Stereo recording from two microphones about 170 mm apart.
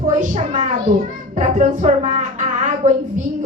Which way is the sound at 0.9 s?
55° right (ahead or behind).